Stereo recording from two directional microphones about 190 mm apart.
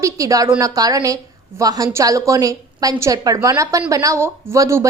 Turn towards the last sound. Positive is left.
turn(degrees=-15)  # may be behind; listen again after turning